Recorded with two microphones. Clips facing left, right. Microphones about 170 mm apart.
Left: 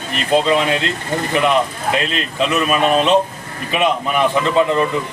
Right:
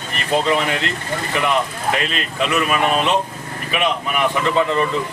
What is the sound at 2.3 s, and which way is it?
Speech, 20° left (ahead or behind).